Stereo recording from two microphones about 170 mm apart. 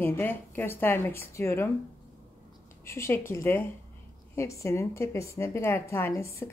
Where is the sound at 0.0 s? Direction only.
10° left (ahead or behind).